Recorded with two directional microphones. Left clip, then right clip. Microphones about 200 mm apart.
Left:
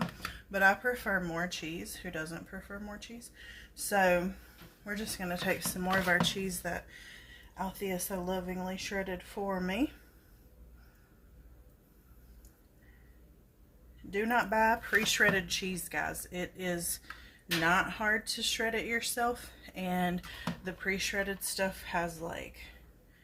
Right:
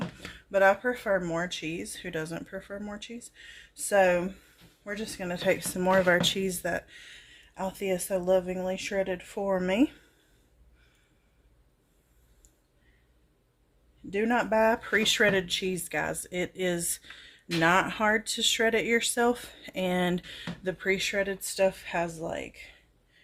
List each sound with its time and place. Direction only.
0.5 s speech: 40° right (ahead or behind)
14.1 s speech: 45° right (ahead or behind)